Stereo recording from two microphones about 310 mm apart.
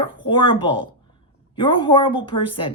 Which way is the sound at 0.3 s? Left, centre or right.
Centre.